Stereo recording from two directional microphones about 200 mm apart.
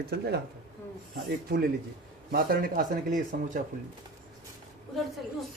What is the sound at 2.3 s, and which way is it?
A man's voice, 50° right (ahead or behind).